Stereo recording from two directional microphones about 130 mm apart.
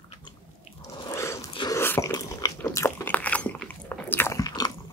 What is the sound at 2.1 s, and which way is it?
Dog, 25° left (ahead or behind).